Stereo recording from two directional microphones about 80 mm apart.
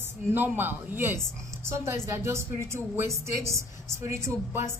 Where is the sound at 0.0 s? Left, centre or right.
Right.